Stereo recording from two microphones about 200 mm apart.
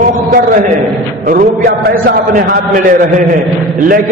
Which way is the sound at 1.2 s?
45° right (ahead or behind).